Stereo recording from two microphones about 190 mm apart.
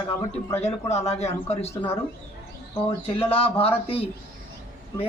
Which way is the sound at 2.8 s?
30° left (ahead or behind).